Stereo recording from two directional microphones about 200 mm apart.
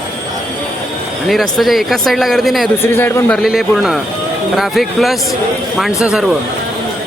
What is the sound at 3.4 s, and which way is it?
Speech, centre (ahead or behind).